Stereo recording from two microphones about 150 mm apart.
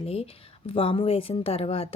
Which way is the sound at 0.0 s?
40° left (ahead or behind).